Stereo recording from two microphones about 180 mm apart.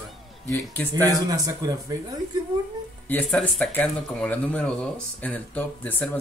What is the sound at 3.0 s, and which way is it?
Speech, 5° left (ahead or behind).